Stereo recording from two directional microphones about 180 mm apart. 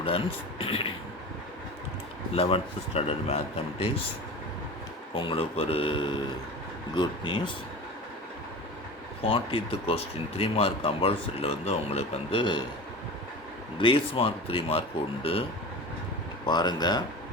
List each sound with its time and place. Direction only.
0.0 s speech: 30° left (ahead or behind)
2.3 s speech: 35° left (ahead or behind)
5.1 s speech: 30° left (ahead or behind)
9.2 s speech: 30° left (ahead or behind)
13.7 s speech: 30° left (ahead or behind)
16.5 s speech: 25° left (ahead or behind)